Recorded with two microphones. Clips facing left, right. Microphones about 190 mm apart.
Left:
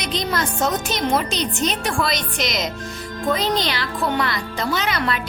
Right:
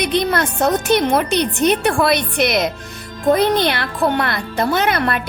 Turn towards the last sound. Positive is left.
turn(degrees=-55)  # may be behind; listen again after turning